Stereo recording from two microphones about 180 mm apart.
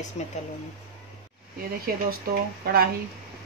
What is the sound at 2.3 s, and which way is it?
Speech, 55° right (ahead or behind).